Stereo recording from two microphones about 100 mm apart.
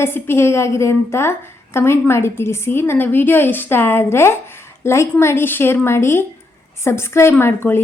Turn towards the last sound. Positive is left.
turn(degrees=25)  # may be behind; listen again after turning